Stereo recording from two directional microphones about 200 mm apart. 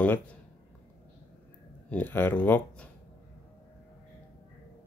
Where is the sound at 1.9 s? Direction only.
10° left (ahead or behind).